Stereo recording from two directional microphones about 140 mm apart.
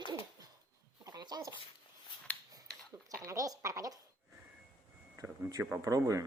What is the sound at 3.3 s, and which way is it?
Speech, 25° right (ahead or behind).